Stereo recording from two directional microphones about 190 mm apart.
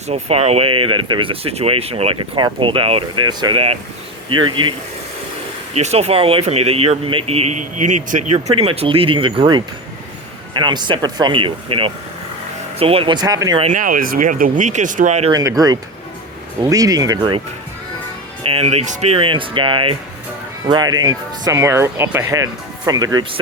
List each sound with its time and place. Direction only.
0.1 s speech: 35° right (ahead or behind)
5.7 s speech: 35° right (ahead or behind)
13.6 s speech: 40° right (ahead or behind)
15.3 s speech: 20° right (ahead or behind)
18.4 s speech: 35° right (ahead or behind)